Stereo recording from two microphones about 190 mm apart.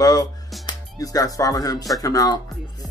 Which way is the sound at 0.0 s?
20° left (ahead or behind).